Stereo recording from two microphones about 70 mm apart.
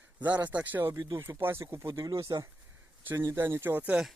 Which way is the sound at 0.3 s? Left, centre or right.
Right.